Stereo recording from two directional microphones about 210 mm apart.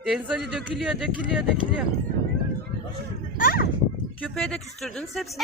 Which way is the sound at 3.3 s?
45° left (ahead or behind).